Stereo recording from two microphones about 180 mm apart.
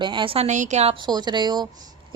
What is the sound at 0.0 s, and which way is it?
A woman's voice, 25° right (ahead or behind).